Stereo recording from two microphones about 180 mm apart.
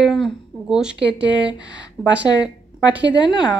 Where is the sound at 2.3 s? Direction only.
20° left (ahead or behind).